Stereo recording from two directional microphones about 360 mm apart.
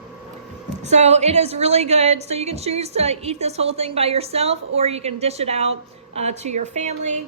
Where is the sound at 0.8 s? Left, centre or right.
Centre.